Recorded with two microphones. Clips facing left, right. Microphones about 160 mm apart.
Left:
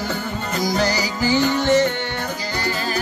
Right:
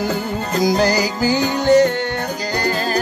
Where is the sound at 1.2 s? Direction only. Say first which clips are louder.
Right 1 dB; 40° right (ahead or behind).